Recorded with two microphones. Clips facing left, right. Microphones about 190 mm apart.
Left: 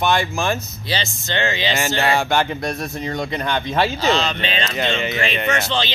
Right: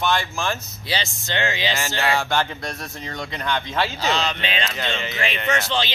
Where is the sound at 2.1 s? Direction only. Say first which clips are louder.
Left 4 dB; 15° left (ahead or behind).